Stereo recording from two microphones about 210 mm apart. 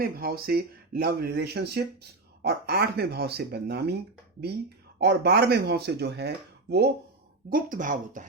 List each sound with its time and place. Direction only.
0.0 s speech: 45° right (ahead or behind)
4.9 s speech: 50° right (ahead or behind)
7.5 s speech: 40° right (ahead or behind)